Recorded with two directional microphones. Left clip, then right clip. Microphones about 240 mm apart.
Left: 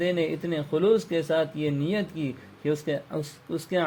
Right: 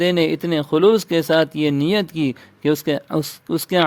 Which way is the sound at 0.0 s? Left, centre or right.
Right.